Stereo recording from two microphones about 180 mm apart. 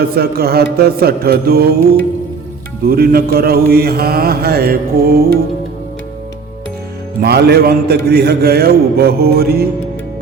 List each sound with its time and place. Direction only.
0.0 s mantra: 60° right (ahead or behind)
2.8 s mantra: 60° right (ahead or behind)
7.2 s mantra: 65° right (ahead or behind)